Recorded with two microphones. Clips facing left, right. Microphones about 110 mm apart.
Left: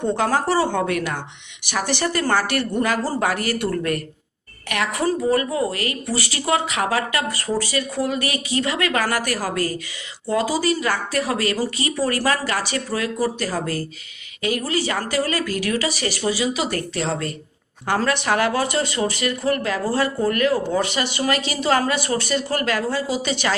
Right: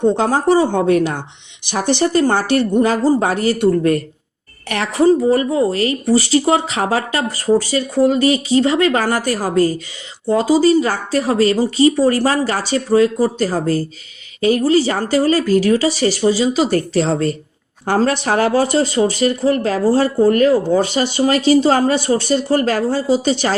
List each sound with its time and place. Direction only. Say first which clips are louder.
0.0 s speech: right 6 dB; 25° right (ahead or behind)